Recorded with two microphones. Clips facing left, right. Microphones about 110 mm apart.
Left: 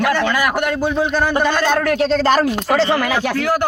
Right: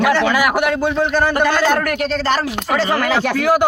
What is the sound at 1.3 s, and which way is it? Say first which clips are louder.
Speech: right 1 dB; 15° left (ahead or behind).